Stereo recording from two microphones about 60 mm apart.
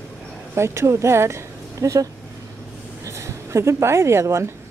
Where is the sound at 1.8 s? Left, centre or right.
Right.